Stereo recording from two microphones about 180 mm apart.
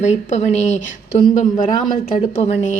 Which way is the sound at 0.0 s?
40° left (ahead or behind).